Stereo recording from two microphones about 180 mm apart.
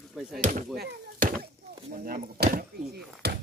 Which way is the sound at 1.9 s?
50° right (ahead or behind).